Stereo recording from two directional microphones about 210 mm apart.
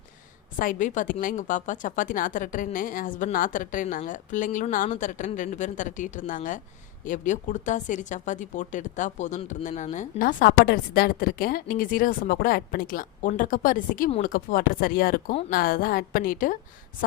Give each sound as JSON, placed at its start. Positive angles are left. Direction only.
{"t": 0.6, "sound": "speech", "side_deg": 40}